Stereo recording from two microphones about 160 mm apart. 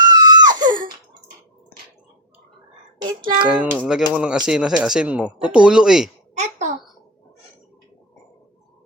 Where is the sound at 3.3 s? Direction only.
5° right (ahead or behind).